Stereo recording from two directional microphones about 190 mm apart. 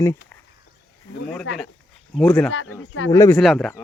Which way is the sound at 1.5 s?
75° left (ahead or behind).